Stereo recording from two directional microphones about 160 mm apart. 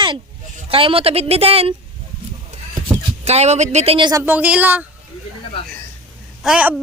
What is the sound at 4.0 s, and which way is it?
Speech, 25° right (ahead or behind).